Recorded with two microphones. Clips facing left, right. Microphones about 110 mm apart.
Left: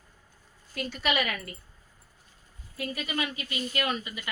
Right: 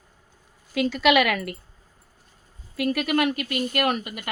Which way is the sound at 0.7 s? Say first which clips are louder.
Right 10 dB; 90° right.